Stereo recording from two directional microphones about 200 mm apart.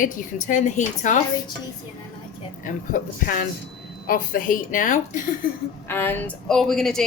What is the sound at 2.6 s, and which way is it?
A woman's voice, 40° left (ahead or behind).